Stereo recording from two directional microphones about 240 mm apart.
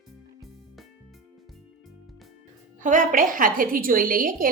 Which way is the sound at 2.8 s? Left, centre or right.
Right.